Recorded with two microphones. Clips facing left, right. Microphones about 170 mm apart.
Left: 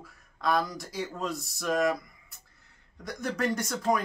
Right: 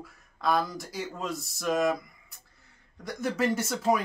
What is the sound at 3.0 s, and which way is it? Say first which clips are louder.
Speech: right 2 dB; centre (ahead or behind).